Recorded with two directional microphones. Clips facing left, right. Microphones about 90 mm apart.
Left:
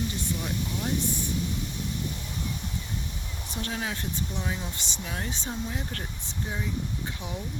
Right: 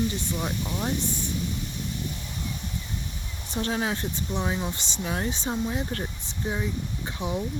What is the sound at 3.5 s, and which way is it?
Speech, 30° right (ahead or behind).